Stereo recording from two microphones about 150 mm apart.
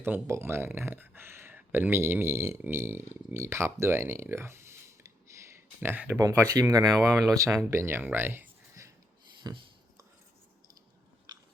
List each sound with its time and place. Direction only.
0.0 s speech: 15° right (ahead or behind)
6.2 s speech: 25° right (ahead or behind)